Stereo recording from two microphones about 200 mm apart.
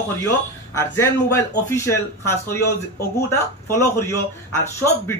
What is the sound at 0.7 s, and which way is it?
Speech, 15° left (ahead or behind).